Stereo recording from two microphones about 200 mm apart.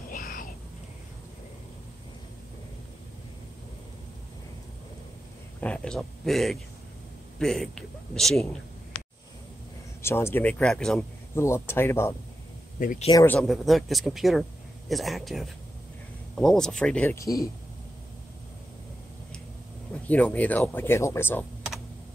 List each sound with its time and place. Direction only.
0.1 s a sound: 45° left (ahead or behind)
5.6 s speech: 5° left (ahead or behind)
10.0 s speech: 10° left (ahead or behind)
11.3 s speech: 15° left (ahead or behind)
12.7 s speech: 40° left (ahead or behind)
13.1 s speech: 10° left (ahead or behind)
19.9 s speech: 5° left (ahead or behind)